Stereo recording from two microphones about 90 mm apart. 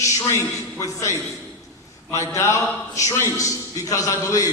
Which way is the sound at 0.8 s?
35° left (ahead or behind).